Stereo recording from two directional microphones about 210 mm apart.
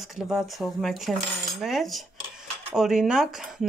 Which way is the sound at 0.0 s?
Centre (ahead or behind).